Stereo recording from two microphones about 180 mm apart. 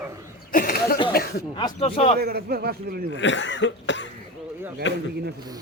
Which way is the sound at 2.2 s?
60° right (ahead or behind).